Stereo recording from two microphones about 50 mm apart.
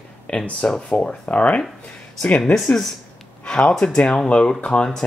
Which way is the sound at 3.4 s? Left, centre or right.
Centre.